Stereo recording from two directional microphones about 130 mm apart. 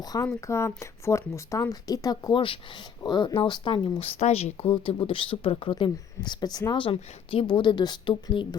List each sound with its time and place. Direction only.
0.0 s speech: 30° left (ahead or behind)